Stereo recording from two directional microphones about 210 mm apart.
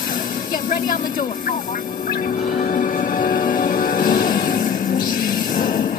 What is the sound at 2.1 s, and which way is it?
Music, 45° left (ahead or behind).